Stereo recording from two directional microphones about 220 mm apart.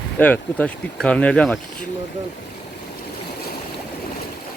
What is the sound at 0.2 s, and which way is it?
Speech, 5° left (ahead or behind).